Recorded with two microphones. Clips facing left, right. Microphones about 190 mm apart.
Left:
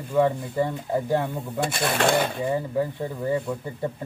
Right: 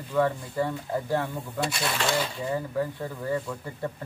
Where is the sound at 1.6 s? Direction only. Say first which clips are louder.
Left 6 dB; 50° left (ahead or behind).